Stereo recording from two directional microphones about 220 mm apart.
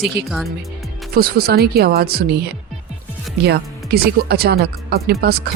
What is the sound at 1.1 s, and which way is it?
Speech, 45° right (ahead or behind).